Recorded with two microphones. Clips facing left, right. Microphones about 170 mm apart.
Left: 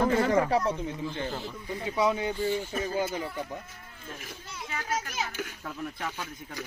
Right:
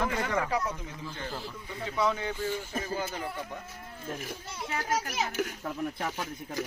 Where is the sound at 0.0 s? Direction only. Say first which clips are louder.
Left 6 dB; 35° left (ahead or behind); by 2.6 s 15° left (ahead or behind).